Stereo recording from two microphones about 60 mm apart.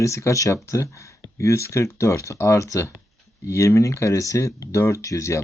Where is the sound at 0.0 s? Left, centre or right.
Left.